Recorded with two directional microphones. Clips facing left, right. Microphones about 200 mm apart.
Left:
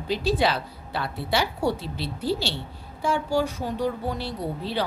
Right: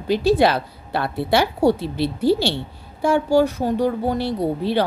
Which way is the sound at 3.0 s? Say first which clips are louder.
Right 8 dB; 70° right (ahead or behind).